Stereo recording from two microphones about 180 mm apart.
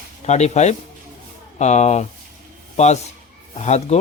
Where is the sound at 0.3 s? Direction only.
40° left (ahead or behind).